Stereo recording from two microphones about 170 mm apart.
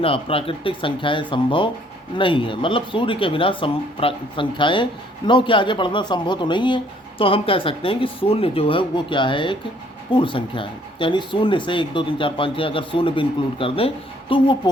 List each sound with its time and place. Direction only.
0.0 s speech: 35° left (ahead or behind)